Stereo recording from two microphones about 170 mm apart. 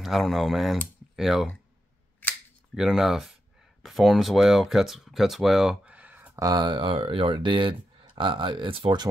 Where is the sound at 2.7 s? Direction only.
5° right (ahead or behind).